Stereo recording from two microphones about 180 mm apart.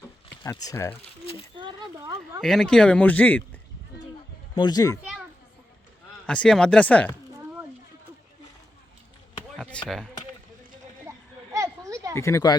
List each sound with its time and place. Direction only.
0.4 s speech: 20° left (ahead or behind)
1.0 s a sound: 35° left (ahead or behind)
1.5 s a sound: 25° right (ahead or behind)
2.4 s speech: centre (ahead or behind)
4.5 s a child's voice: 20° left (ahead or behind)
6.2 s speech: 5° left (ahead or behind)
9.6 s chop: 5° left (ahead or behind)
11.1 s children playing: 15° right (ahead or behind)
11.5 s a sound: 15° right (ahead or behind)
12.1 s speech: 15° left (ahead or behind)